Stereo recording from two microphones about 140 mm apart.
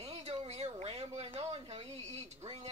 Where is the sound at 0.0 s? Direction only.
50° right (ahead or behind).